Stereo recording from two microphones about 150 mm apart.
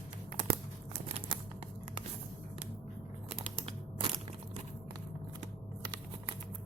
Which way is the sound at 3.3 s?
40° right (ahead or behind).